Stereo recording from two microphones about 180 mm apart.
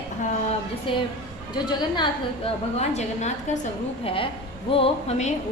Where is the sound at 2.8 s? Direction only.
40° left (ahead or behind).